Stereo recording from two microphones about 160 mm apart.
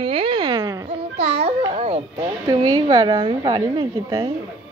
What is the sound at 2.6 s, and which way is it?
A woman's voice, 25° right (ahead or behind).